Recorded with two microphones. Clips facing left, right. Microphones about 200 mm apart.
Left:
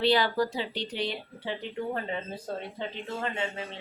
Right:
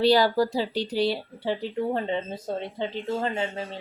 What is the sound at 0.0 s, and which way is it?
Speech, 35° right (ahead or behind).